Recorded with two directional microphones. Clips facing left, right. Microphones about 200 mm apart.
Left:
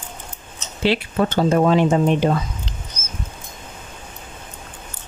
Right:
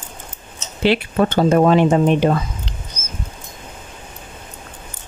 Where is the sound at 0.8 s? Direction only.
60° right (ahead or behind).